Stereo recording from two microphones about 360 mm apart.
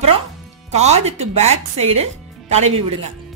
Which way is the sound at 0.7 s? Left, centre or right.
Centre.